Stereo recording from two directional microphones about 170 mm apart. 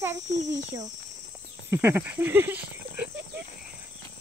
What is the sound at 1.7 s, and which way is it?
Speech, 15° right (ahead or behind).